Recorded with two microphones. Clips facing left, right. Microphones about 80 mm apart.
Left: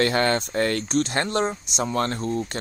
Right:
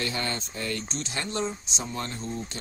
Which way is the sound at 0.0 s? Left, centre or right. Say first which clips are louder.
Left 10 dB; left.